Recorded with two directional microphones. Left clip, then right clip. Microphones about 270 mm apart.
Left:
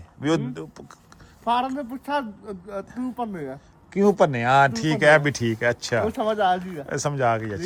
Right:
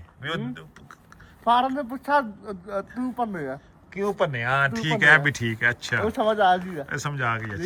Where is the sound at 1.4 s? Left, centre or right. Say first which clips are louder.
Right 2 dB; centre.